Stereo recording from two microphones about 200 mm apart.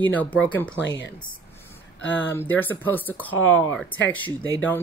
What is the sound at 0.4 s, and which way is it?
Speech, 5° left (ahead or behind).